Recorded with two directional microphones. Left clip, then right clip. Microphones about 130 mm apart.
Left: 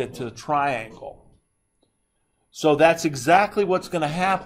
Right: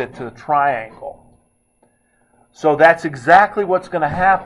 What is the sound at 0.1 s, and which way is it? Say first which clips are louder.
Speech: right 6 dB; 15° left (ahead or behind).